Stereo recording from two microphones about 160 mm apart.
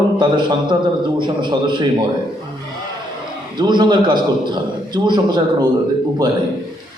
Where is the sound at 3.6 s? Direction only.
30° right (ahead or behind).